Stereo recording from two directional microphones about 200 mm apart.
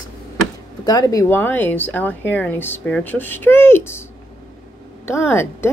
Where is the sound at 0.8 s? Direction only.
20° left (ahead or behind).